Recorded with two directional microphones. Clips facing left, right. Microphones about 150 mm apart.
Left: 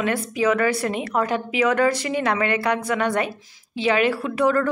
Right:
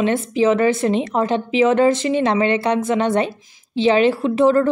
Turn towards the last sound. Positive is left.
turn(degrees=-25)  # may be behind; listen again after turning